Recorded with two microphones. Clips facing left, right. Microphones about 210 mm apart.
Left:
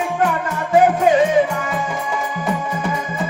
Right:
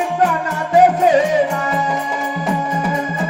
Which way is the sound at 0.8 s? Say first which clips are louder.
Right 1 dB; 40° right (ahead or behind).